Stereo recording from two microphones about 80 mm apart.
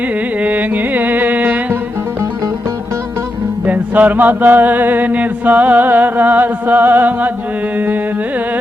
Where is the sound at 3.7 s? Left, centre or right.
Right.